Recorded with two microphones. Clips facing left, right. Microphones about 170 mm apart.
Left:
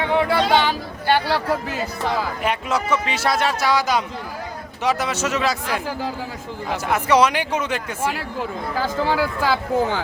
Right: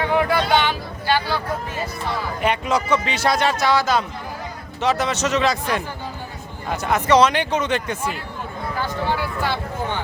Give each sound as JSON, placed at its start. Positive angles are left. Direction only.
{"t": 0.1, "sound": "a sound", "side_deg": 25}
{"t": 1.0, "sound": "speech", "side_deg": 65}
{"t": 2.4, "sound": "a man's voice", "side_deg": 0}
{"t": 6.7, "sound": "speech", "side_deg": 5}
{"t": 8.0, "sound": "speech", "side_deg": 90}